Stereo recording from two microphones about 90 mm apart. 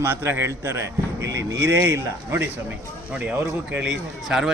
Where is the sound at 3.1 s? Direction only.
15° right (ahead or behind).